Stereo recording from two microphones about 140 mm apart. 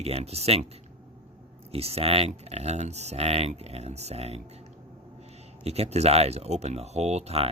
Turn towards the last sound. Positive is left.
turn(degrees=-50)  # may be behind; listen again after turning